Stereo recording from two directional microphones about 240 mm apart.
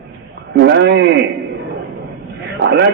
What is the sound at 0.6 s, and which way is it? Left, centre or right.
Speech, right.